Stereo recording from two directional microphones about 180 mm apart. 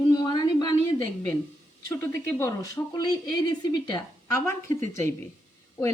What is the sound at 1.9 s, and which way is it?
Speech, 15° left (ahead or behind).